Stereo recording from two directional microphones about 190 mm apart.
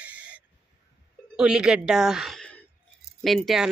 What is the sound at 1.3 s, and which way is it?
A woman's voice, 5° right (ahead or behind).